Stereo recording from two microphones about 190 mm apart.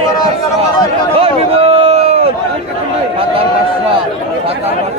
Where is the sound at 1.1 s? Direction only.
30° right (ahead or behind).